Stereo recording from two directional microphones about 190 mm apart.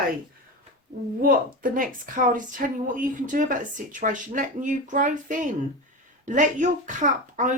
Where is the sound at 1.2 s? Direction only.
45° right (ahead or behind).